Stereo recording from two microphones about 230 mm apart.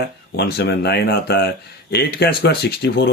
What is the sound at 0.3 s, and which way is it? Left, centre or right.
Speech, left.